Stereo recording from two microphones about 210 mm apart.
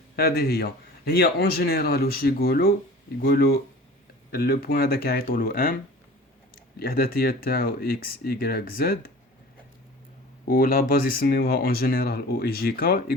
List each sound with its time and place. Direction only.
0.2 s speech: 45° left (ahead or behind)
6.7 s speech: 45° left (ahead or behind)
10.5 s speech: 45° left (ahead or behind)